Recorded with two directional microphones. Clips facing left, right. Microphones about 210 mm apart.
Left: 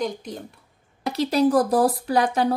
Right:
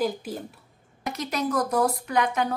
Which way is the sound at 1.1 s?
30° left (ahead or behind).